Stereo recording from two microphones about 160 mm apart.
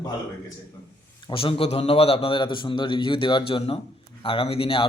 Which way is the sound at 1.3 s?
35° left (ahead or behind).